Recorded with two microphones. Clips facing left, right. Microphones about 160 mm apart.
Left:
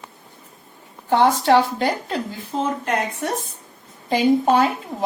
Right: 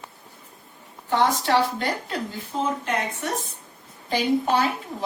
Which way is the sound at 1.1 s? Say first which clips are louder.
Left 5 dB; 55° left (ahead or behind).